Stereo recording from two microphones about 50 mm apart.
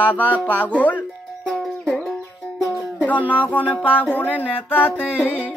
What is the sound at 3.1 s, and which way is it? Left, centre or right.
Music, left.